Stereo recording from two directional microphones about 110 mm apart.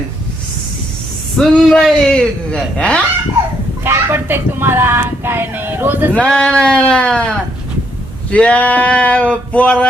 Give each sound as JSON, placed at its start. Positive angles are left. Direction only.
{"t": 1.4, "sound": "a man's voice", "side_deg": 10}
{"t": 3.8, "sound": "speech", "side_deg": -20}
{"t": 6.1, "sound": "a man's voice", "side_deg": 10}